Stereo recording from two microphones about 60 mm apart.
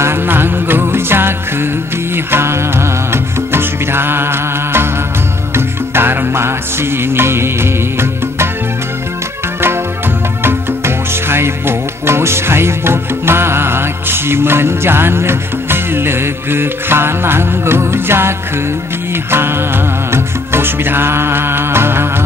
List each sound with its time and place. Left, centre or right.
0.0 s music: right
11.2 s music: right
19.3 s music: right